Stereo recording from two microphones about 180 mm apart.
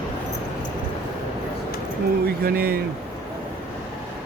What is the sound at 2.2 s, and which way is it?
Speech, 60° right (ahead or behind).